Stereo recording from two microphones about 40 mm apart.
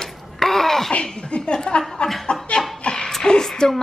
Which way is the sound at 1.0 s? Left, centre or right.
Left.